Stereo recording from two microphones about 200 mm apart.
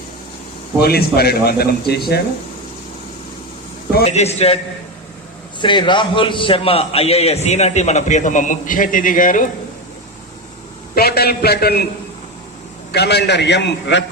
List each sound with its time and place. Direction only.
0.8 s a man's voice: 50° left (ahead or behind)
4.0 s a man's voice: 35° left (ahead or behind)
10.9 s a man's voice: 50° left (ahead or behind)
12.9 s a man's voice: 55° left (ahead or behind)